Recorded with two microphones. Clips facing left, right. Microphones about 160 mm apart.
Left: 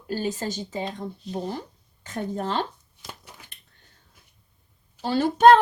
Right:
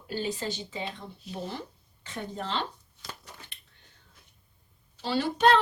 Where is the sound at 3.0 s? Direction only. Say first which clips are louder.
Left 2 dB; 20° left (ahead or behind).